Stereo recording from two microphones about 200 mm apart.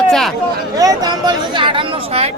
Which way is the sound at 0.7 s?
20° right (ahead or behind).